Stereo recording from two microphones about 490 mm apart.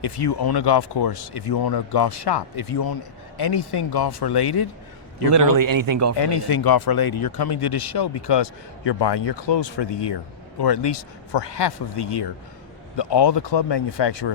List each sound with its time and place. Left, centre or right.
0.0 s speech: left
5.3 s a man's voice: right
6.1 s speech: left